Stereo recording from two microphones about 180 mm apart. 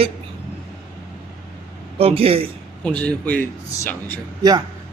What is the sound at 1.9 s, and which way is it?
Speech, 35° right (ahead or behind).